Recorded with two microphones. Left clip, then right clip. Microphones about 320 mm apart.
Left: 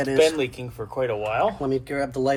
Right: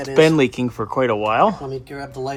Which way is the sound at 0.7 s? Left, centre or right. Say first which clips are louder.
Right 7 dB; right.